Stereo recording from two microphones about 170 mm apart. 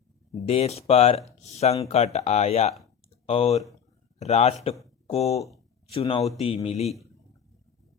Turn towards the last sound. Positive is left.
turn(degrees=40)  # may be behind; listen again after turning